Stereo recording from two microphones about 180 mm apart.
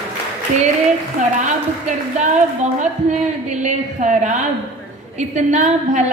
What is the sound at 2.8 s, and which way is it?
A woman's voice, 40° right (ahead or behind).